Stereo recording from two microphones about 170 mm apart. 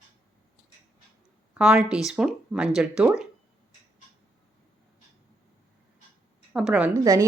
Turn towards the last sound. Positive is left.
turn(degrees=-20)  # may be behind; listen again after turning